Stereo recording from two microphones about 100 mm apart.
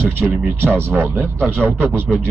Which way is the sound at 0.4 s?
20° right (ahead or behind).